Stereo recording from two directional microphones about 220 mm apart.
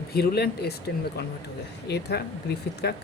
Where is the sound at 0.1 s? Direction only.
45° left (ahead or behind).